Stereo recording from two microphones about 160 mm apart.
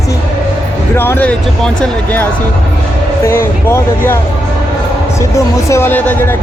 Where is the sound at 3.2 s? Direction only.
15° left (ahead or behind).